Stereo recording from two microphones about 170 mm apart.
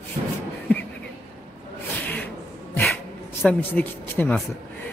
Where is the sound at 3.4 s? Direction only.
10° left (ahead or behind).